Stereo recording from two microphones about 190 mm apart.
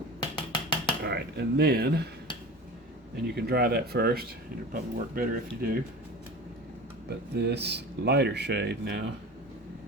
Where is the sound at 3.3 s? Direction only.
55° right (ahead or behind).